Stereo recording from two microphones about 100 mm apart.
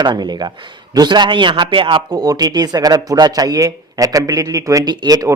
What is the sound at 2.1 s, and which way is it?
Speech, 40° right (ahead or behind).